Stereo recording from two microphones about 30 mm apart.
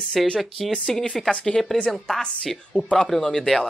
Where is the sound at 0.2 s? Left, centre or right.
Centre.